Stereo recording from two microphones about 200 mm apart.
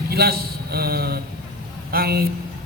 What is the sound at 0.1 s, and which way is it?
A man's voice, 50° right (ahead or behind).